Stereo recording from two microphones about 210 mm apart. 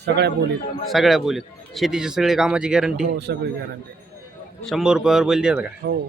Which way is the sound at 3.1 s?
50° right (ahead or behind).